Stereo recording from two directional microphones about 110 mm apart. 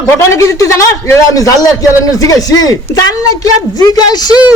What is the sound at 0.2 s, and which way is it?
A man's voice, 25° left (ahead or behind).